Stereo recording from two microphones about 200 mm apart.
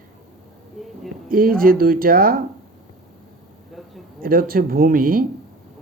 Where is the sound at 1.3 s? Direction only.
45° right (ahead or behind).